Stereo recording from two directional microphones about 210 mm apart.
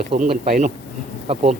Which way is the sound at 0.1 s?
45° right (ahead or behind).